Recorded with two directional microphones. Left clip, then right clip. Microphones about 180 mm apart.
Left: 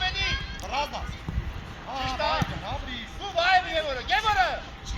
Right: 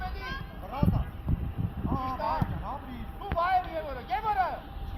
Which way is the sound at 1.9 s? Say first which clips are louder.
Left 4 dB; 85° right.